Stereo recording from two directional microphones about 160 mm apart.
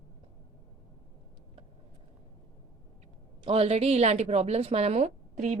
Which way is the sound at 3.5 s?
40° right (ahead or behind).